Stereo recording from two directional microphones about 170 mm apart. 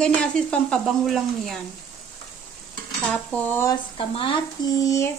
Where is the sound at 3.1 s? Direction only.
10° left (ahead or behind).